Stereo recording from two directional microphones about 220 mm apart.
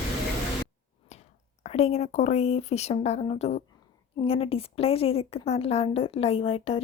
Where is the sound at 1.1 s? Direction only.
30° left (ahead or behind).